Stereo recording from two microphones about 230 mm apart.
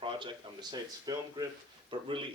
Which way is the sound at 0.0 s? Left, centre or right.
Right.